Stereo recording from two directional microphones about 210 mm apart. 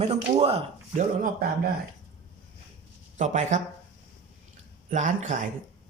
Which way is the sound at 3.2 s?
35° right (ahead or behind).